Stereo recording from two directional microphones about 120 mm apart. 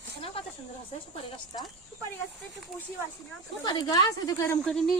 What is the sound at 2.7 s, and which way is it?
Speech, centre (ahead or behind).